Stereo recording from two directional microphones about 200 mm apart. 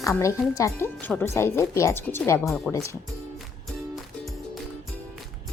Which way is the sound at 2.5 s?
Centre (ahead or behind).